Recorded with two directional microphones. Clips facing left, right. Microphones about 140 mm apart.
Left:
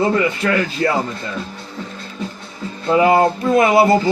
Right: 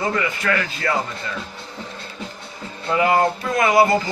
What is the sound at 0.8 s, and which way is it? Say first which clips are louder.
Speech: left 7 dB; 30° left (ahead or behind).